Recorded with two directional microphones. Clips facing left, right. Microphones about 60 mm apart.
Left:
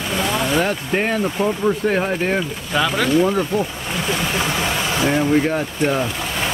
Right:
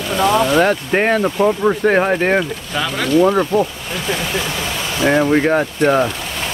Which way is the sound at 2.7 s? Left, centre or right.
Centre.